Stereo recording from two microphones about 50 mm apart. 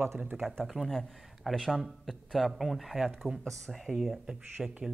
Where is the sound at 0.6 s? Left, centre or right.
Centre.